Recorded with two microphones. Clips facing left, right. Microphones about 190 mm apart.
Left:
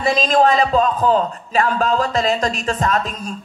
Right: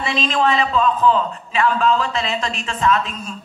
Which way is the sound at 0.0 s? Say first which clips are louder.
Left 4 dB; 40° left (ahead or behind).